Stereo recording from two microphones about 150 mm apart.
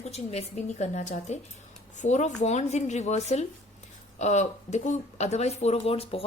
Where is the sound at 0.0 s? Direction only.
45° left (ahead or behind).